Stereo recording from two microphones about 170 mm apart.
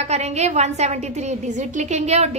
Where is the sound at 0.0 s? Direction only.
40° right (ahead or behind).